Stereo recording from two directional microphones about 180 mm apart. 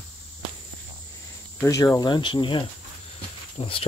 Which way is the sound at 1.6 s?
15° left (ahead or behind).